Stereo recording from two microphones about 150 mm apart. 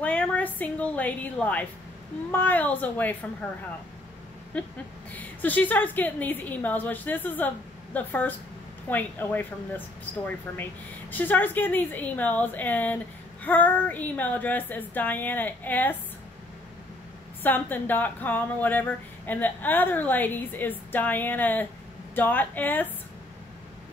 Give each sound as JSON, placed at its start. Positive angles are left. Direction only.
{"t": 0.0, "sound": "a woman's voice", "side_deg": 10}
{"t": 5.1, "sound": "speech", "side_deg": 10}
{"t": 17.4, "sound": "speech", "side_deg": 10}